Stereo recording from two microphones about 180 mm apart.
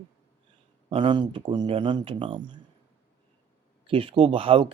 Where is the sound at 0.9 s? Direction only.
25° right (ahead or behind).